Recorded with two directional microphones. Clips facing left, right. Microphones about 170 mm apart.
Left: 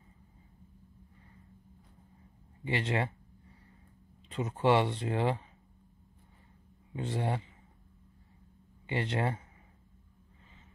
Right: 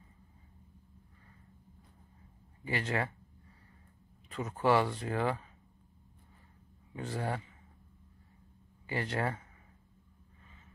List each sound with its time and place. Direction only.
2.6 s speech: 25° left (ahead or behind)
4.3 s speech: 25° left (ahead or behind)
7.0 s speech: 25° left (ahead or behind)
8.8 s speech: 25° left (ahead or behind)